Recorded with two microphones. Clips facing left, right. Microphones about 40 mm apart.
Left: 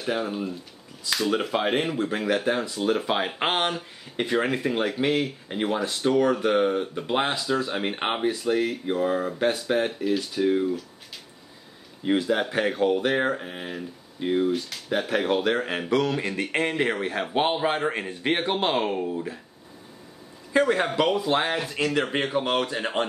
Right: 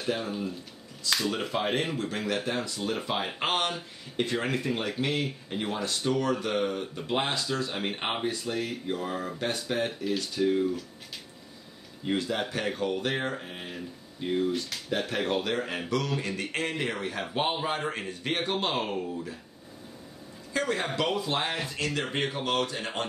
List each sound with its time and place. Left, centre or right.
0.0 s speech: centre
1.7 s speech: centre
2.0 s a man's voice: centre
2.9 s speech: centre
3.3 s a man's voice: left
12.0 s speech: centre
14.5 s speech: centre
15.5 s a man's voice: left
20.5 s a man's voice: left
21.5 s speech: centre
21.7 s a man's voice: centre